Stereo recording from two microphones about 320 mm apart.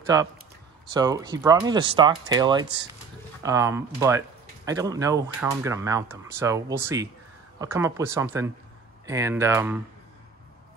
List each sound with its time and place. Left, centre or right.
0.0 s speech: centre